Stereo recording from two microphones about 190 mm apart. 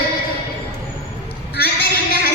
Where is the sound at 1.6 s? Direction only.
55° left (ahead or behind).